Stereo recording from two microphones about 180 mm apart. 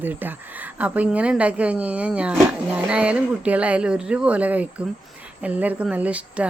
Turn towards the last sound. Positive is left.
turn(degrees=-5)  # may be behind; listen again after turning